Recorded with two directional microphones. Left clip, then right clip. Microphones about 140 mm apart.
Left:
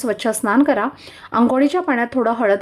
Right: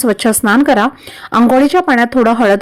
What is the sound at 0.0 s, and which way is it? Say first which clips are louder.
A woman's voice: right 7 dB; 30° right (ahead or behind).